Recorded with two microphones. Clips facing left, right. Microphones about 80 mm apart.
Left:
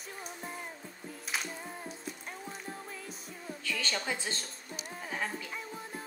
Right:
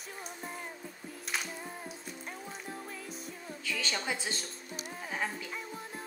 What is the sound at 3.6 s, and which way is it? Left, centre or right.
Speech, centre.